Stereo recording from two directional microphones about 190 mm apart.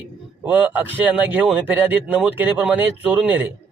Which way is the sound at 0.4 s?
10° right (ahead or behind).